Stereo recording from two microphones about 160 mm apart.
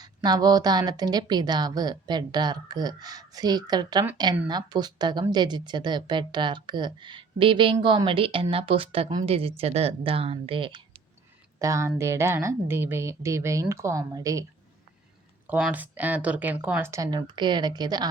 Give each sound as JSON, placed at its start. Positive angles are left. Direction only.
{"t": 0.0, "sound": "a woman's voice", "side_deg": -25}
{"t": 11.6, "sound": "a woman's voice", "side_deg": -20}
{"t": 15.7, "sound": "a woman's voice", "side_deg": -10}